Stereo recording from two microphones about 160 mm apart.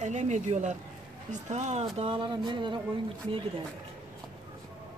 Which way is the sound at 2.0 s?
35° right (ahead or behind).